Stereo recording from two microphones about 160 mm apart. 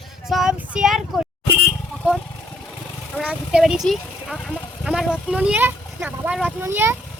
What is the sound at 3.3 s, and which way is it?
Speech, 5° right (ahead or behind).